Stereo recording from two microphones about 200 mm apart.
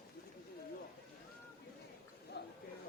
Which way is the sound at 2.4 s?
55° left (ahead or behind).